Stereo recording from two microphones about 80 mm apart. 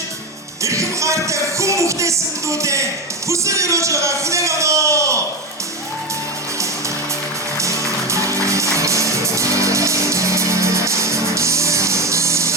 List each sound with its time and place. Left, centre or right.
0.6 s music: right
3.2 s a man's voice: right
7.6 s music: right